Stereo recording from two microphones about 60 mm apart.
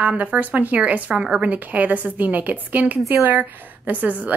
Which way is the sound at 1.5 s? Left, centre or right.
Right.